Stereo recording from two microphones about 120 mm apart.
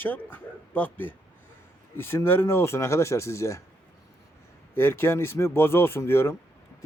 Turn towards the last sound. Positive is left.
turn(degrees=20)  # may be behind; listen again after turning